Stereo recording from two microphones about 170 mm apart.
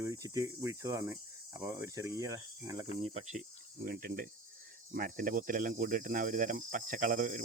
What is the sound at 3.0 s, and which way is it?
Speech, 40° right (ahead or behind).